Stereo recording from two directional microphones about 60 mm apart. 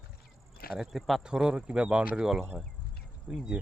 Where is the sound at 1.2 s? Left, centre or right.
Centre.